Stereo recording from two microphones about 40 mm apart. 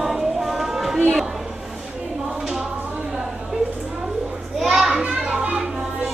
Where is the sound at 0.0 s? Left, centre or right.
Centre.